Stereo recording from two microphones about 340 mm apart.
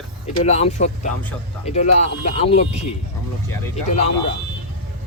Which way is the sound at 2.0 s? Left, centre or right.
Centre.